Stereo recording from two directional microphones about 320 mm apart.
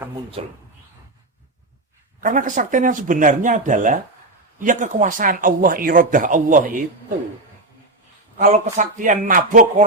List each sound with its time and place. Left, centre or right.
0.4 s speech: centre
2.2 s speech: right
8.4 s speech: right